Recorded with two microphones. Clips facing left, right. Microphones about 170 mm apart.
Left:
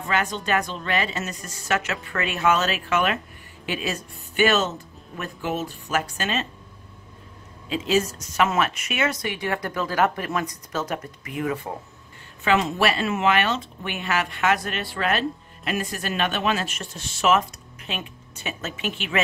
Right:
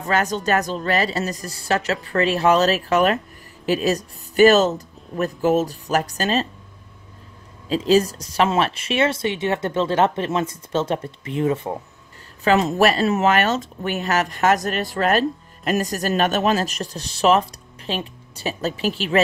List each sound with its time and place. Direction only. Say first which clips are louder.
0.0 s speech: right 4 dB; 40° right (ahead or behind)
7.7 s speech: right 6 dB; 35° right (ahead or behind)
12.4 s speech: right 5 dB; 40° right (ahead or behind)